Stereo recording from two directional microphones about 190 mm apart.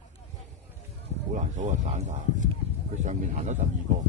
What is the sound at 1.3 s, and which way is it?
Speech, 40° right (ahead or behind).